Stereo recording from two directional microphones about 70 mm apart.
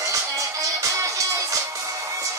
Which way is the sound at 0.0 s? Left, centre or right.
Right.